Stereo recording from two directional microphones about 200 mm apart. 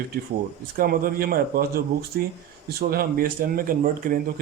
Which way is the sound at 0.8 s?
45° right (ahead or behind).